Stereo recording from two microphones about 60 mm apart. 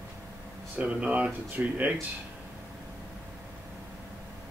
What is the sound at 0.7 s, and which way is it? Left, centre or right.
Speech, right.